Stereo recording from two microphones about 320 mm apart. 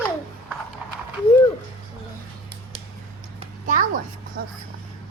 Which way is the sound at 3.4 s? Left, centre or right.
Right.